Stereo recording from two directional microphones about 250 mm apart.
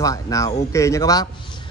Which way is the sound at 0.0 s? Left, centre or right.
Centre.